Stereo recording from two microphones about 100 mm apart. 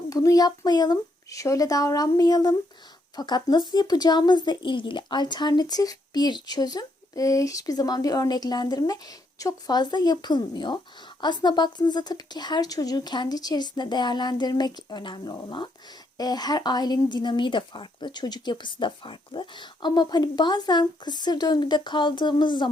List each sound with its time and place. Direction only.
0.1 s a woman's voice: 35° left (ahead or behind); by 22.7 s 50° left (ahead or behind)